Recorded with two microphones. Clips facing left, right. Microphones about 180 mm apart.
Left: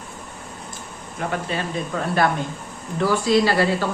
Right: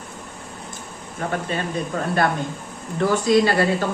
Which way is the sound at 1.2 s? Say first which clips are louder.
Right 1 dB; 45° right (ahead or behind).